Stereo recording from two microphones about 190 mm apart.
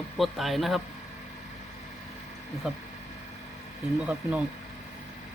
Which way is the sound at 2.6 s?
Centre (ahead or behind).